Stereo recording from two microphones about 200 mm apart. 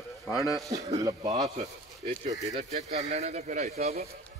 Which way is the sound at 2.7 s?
35° right (ahead or behind).